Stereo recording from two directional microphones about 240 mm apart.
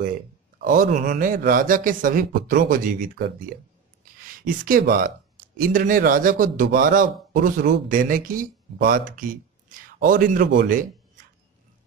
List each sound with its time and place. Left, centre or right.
0.7 s a man's voice: right